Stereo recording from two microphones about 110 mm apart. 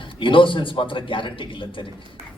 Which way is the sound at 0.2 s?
50° left (ahead or behind).